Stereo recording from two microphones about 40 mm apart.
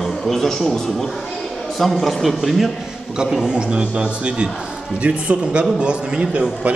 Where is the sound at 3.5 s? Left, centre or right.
Right.